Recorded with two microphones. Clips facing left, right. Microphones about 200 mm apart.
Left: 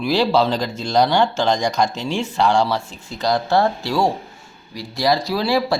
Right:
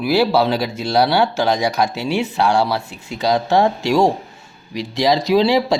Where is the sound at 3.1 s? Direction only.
10° right (ahead or behind).